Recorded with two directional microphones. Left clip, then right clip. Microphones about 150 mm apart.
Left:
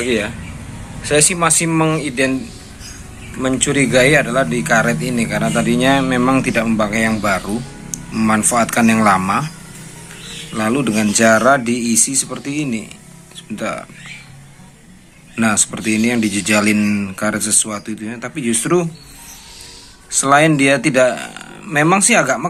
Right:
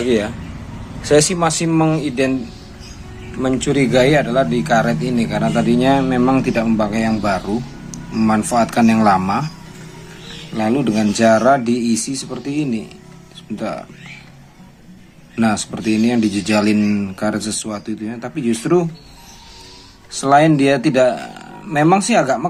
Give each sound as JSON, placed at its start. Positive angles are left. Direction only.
{"t": 0.0, "sound": "speech", "side_deg": -20}
{"t": 1.3, "sound": "speech", "side_deg": -15}
{"t": 3.4, "sound": "speech", "side_deg": -10}
{"t": 10.5, "sound": "speech", "side_deg": -5}
{"t": 15.4, "sound": "speech", "side_deg": -10}
{"t": 20.1, "sound": "speech", "side_deg": -10}